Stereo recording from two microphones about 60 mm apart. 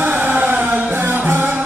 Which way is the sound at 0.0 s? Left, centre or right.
Right.